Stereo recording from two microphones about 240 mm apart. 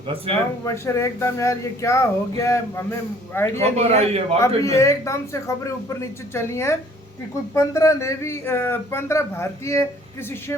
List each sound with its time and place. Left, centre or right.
0.6 s a man's voice: centre
3.8 s a man's voice: right
4.4 s a man's voice: centre